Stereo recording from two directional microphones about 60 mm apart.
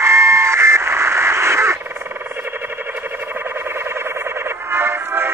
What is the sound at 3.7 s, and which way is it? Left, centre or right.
Music, right.